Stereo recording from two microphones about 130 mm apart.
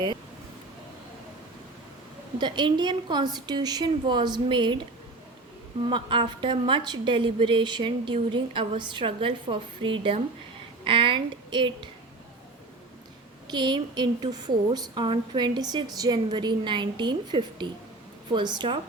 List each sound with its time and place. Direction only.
2.4 s a woman's voice: 35° right (ahead or behind)
5.9 s a woman's voice: 40° right (ahead or behind)
13.5 s a woman's voice: 35° right (ahead or behind)